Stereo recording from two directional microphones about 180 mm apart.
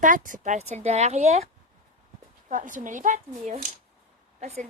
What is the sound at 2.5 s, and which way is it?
A woman's voice, 45° right (ahead or behind).